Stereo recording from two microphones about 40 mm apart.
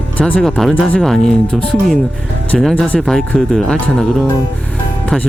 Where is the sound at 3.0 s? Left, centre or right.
Centre.